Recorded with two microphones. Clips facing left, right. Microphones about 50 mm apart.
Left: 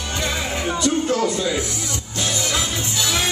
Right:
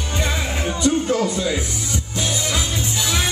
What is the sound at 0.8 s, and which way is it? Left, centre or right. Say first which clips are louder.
Music: right 2 dB; centre.